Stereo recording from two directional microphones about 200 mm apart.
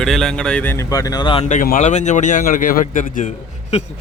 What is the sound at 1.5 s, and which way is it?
A man's voice, 40° left (ahead or behind).